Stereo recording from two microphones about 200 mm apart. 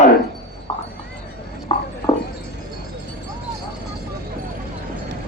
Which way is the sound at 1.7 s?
25° left (ahead or behind).